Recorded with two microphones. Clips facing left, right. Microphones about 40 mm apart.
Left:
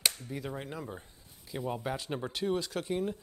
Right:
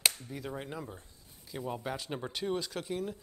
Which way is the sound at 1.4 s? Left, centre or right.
Centre.